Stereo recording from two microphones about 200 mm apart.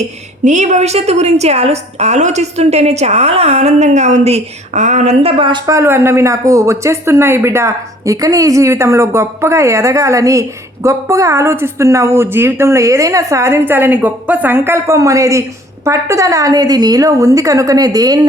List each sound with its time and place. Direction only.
0.4 s a woman's voice: 35° right (ahead or behind); by 18.3 s 20° right (ahead or behind)